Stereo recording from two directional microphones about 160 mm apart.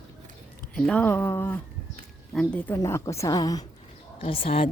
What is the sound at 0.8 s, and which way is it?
A woman's voice, 5° left (ahead or behind).